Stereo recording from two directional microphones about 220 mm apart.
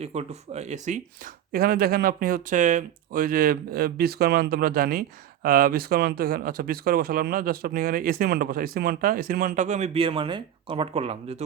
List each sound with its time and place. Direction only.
0.0 s speech: 30° right (ahead or behind)